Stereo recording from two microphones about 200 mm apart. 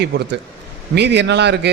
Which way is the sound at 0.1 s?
55° right (ahead or behind).